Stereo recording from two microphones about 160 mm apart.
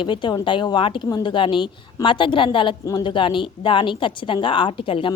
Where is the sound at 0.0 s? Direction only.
30° left (ahead or behind).